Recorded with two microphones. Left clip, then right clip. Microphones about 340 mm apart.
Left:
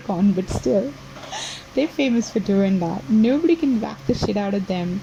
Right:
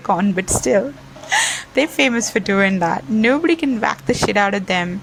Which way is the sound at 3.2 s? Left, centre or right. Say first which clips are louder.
Right 2 dB; centre.